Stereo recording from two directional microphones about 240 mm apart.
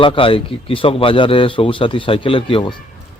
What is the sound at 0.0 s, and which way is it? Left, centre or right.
Speech, left.